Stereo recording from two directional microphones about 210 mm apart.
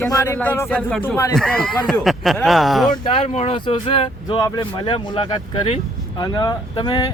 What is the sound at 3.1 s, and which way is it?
Speech, 30° left (ahead or behind).